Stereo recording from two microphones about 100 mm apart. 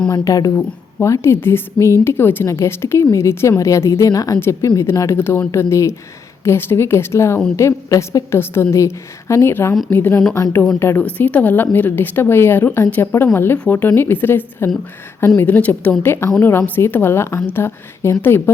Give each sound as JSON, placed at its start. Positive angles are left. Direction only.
{"t": 0.1, "sound": "a woman's voice", "side_deg": 35}
{"t": 4.4, "sound": "speech", "side_deg": 25}
{"t": 11.0, "sound": "a woman's voice", "side_deg": 15}